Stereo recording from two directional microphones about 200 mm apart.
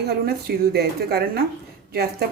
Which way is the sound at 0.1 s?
55° right (ahead or behind).